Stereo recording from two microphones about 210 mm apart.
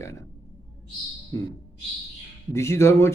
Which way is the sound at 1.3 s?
15° left (ahead or behind).